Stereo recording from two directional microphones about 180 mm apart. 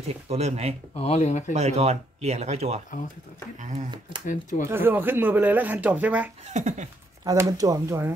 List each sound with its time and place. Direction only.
0.1 s speech: 35° right (ahead or behind)
0.9 s speech: 35° left (ahead or behind)
1.5 s speech: 35° right (ahead or behind)
4.3 s speech: 45° left (ahead or behind)
4.6 s speech: 10° right (ahead or behind)
6.4 s speech: 40° right (ahead or behind)
7.2 s speech: 20° right (ahead or behind)